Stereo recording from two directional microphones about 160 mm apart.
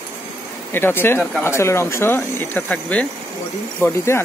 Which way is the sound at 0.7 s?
15° left (ahead or behind).